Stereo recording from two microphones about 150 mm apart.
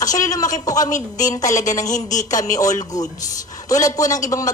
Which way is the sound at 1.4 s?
55° left (ahead or behind).